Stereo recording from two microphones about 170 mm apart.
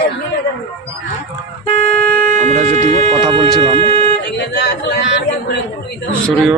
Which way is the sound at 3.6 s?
30° right (ahead or behind).